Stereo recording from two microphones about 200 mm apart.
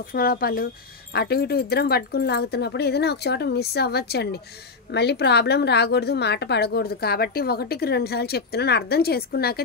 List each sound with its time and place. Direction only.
0.1 s a woman's voice: 45° left (ahead or behind)